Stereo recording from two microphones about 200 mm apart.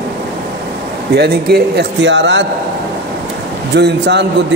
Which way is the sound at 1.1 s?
55° right (ahead or behind).